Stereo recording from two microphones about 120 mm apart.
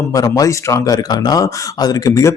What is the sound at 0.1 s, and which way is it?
Speech, 30° left (ahead or behind).